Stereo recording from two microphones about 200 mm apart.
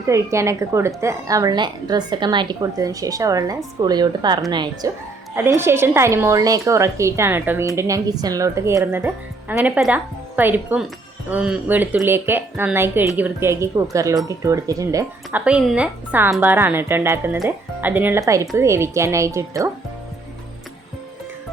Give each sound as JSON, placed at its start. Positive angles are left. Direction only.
{"t": 0.1, "sound": "a woman's voice", "side_deg": -15}
{"t": 5.3, "sound": "a woman's voice", "side_deg": -10}